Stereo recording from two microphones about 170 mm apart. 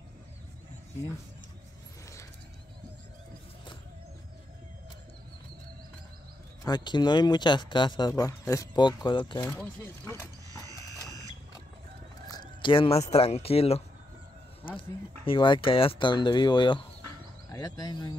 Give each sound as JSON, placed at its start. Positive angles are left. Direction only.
{"t": 6.6, "sound": "speech", "side_deg": 25}
{"t": 10.5, "sound": "mechanisms", "side_deg": -20}
{"t": 12.3, "sound": "speech", "side_deg": 25}